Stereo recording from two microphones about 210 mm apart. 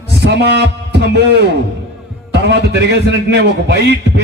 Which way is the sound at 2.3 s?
55° right (ahead or behind).